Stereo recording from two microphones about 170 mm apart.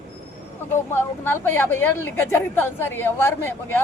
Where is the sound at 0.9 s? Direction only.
15° left (ahead or behind).